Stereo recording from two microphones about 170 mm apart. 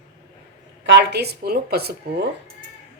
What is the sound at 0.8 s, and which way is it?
A woman's voice, 85° right.